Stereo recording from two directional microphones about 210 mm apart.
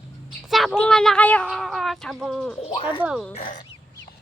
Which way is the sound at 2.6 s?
25° left (ahead or behind).